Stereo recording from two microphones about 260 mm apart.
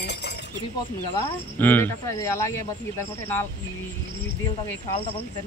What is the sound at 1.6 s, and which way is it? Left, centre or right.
Speech, centre.